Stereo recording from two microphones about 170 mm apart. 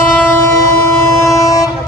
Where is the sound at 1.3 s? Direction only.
20° left (ahead or behind).